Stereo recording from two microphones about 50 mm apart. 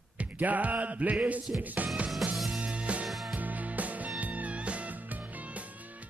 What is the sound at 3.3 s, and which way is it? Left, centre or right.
Music, right.